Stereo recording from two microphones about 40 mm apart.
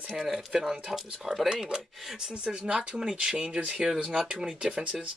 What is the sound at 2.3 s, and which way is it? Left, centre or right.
Speech, right.